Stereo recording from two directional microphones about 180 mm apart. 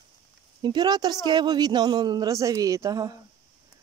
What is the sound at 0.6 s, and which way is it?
Speech, 25° right (ahead or behind).